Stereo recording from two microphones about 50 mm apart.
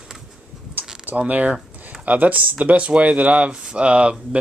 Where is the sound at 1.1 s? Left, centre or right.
Right.